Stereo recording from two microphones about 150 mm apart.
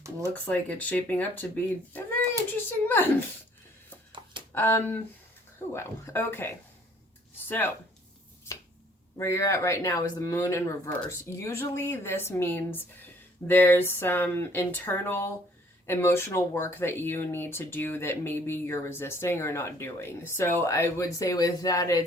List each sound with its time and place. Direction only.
0.4 s speech: 10° left (ahead or behind)
1.9 s a sound: 15° left (ahead or behind)
2.8 s speech: 15° left (ahead or behind)
4.5 s speech: 15° left (ahead or behind)
9.1 s speech: 20° left (ahead or behind)